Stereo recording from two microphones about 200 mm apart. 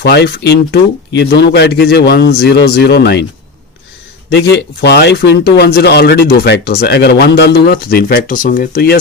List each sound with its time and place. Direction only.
0.0 s speech: 55° left (ahead or behind)
4.3 s speech: 60° left (ahead or behind)